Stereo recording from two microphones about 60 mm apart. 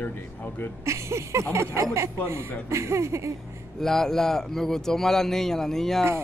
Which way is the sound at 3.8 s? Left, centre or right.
Centre.